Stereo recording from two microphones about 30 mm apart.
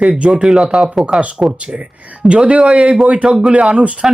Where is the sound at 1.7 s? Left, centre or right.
Right.